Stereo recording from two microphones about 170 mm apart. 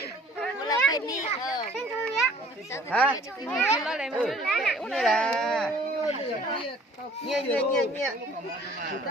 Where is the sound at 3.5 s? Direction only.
Centre (ahead or behind).